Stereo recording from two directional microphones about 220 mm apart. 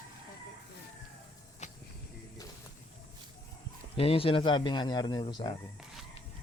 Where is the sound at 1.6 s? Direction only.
35° left (ahead or behind).